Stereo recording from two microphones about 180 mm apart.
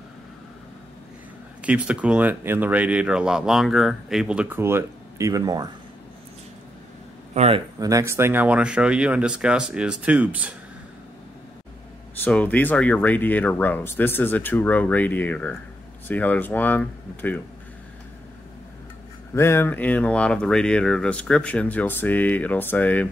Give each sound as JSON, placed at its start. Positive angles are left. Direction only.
{"t": 1.6, "sound": "speech", "side_deg": -5}
{"t": 7.3, "sound": "speech", "side_deg": -35}
{"t": 7.8, "sound": "speech", "side_deg": -15}
{"t": 12.3, "sound": "speech", "side_deg": 10}
{"t": 19.3, "sound": "speech", "side_deg": 15}